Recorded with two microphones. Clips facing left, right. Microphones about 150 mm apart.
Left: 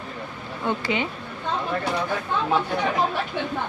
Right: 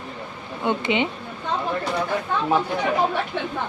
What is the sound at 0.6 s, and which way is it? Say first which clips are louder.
Speech: right 3 dB; 20° right (ahead or behind).